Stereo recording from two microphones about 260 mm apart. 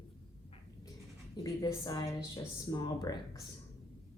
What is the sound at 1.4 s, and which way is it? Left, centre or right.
Speech, centre.